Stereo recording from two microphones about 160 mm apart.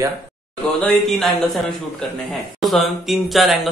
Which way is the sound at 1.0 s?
Centre (ahead or behind).